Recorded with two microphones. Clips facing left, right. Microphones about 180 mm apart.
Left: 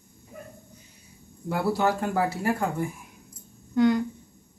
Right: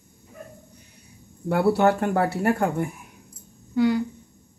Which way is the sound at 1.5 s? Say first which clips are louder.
Right 5 dB; 60° right (ahead or behind).